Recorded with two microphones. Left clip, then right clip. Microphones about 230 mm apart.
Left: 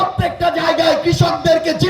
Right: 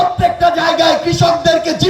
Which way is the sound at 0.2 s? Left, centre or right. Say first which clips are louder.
Right 5 dB; left.